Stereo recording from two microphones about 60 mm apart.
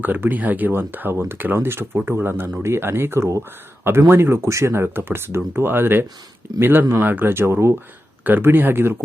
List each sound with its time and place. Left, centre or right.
0.0 s speech: right